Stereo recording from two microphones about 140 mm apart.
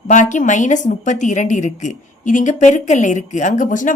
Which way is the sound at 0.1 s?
60° left (ahead or behind).